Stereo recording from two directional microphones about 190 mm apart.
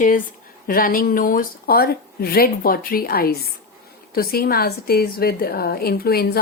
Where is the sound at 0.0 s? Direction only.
45° left (ahead or behind).